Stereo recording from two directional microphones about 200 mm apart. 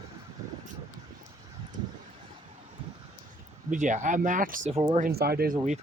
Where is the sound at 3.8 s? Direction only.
40° right (ahead or behind).